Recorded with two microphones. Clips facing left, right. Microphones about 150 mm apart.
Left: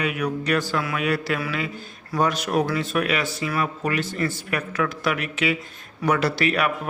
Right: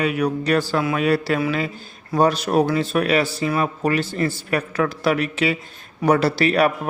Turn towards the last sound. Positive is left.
turn(degrees=-35)  # may be behind; listen again after turning